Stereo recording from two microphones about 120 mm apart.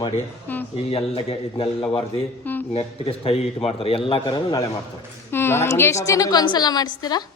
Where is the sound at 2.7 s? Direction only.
55° left (ahead or behind).